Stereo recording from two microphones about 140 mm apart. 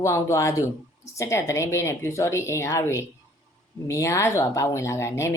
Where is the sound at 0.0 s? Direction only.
20° left (ahead or behind).